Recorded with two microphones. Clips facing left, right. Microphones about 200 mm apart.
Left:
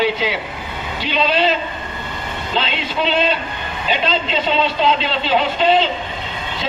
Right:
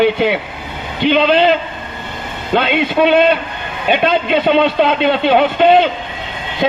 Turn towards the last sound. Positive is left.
turn(degrees=-55)  # may be behind; listen again after turning